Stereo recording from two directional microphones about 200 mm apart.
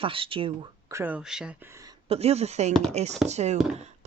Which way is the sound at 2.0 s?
30° right (ahead or behind).